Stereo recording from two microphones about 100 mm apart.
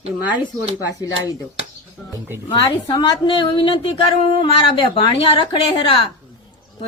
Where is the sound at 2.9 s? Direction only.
50° left (ahead or behind).